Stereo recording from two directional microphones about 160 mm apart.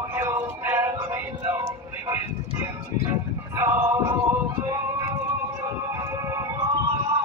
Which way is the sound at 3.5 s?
20° right (ahead or behind).